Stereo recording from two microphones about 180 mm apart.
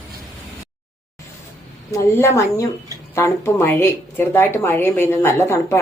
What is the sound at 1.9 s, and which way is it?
A woman's voice, 15° left (ahead or behind).